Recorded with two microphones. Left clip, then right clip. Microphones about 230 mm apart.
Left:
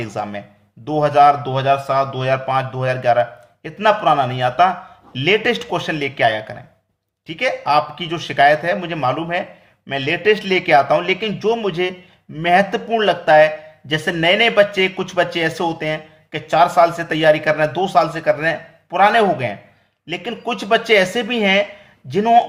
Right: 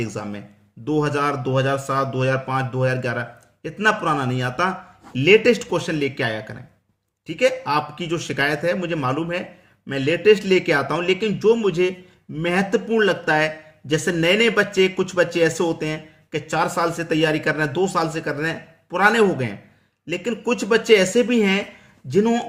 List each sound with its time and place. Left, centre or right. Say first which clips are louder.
0.0 s a man's voice: left 5 dB; centre